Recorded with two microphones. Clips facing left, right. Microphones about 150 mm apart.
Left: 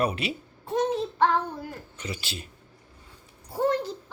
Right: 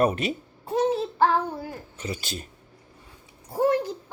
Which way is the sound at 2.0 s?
40° right (ahead or behind).